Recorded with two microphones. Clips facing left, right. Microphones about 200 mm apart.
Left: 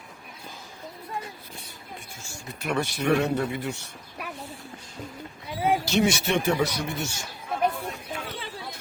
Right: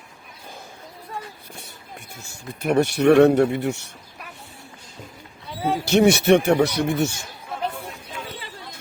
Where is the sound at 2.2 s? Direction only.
55° right (ahead or behind).